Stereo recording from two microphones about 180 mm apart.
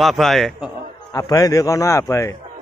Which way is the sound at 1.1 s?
20° left (ahead or behind).